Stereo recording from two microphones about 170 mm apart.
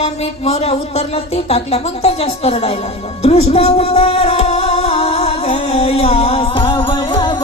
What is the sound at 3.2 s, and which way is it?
Music, 35° left (ahead or behind).